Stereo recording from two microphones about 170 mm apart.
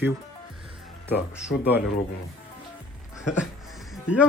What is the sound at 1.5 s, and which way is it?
Speech, 90° left.